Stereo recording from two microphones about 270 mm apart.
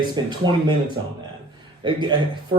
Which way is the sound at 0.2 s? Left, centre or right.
Centre.